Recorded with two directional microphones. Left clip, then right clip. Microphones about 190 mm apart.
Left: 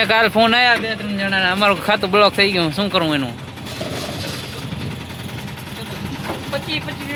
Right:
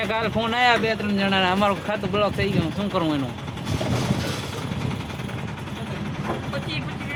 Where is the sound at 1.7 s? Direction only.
35° left (ahead or behind).